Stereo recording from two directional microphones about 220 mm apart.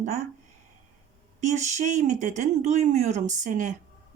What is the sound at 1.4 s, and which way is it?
Speech, 30° right (ahead or behind).